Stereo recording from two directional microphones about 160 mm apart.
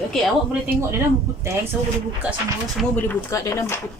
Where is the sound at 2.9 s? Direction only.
15° left (ahead or behind).